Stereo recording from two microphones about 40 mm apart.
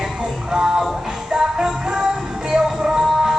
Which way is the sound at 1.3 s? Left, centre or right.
Centre.